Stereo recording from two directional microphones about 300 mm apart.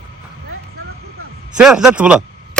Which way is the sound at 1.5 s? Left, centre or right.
Centre.